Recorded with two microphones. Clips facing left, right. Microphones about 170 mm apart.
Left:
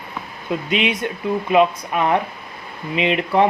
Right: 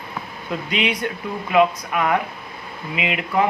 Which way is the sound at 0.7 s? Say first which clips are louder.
Left 1 dB; 25° left (ahead or behind).